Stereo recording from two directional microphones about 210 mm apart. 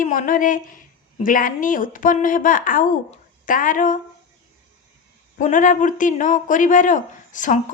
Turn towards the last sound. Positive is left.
turn(degrees=40)  # may be behind; listen again after turning